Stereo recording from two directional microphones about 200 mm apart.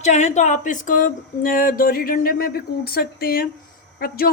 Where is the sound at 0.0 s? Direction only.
35° left (ahead or behind).